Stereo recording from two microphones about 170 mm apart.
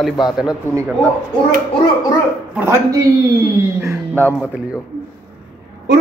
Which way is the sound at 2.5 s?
15° right (ahead or behind).